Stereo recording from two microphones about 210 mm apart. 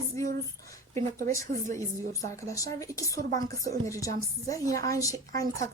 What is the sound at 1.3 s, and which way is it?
A woman's voice, 15° left (ahead or behind).